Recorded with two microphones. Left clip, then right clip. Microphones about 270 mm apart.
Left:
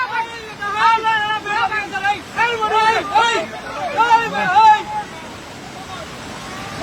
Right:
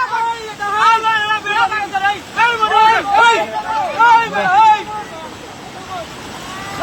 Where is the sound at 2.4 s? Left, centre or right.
Centre.